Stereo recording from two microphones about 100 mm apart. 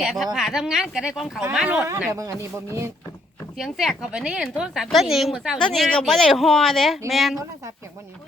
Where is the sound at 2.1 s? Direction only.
30° right (ahead or behind).